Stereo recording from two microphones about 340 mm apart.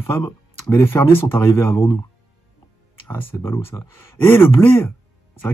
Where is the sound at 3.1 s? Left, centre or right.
Centre.